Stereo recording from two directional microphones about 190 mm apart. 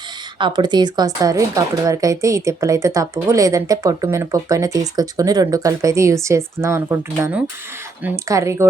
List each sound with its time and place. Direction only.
0.3 s a woman's voice: 25° right (ahead or behind)